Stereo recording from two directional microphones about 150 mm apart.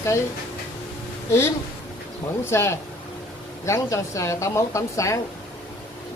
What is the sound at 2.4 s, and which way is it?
Speech, 20° left (ahead or behind).